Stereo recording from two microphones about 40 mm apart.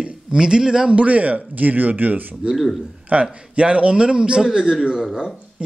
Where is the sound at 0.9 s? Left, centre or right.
Right.